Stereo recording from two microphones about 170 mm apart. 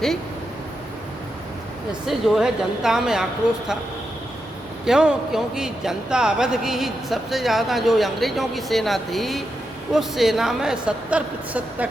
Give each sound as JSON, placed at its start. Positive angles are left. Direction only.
{"t": 2.0, "sound": "a man's voice", "side_deg": 0}
{"t": 4.9, "sound": "a man's voice", "side_deg": -5}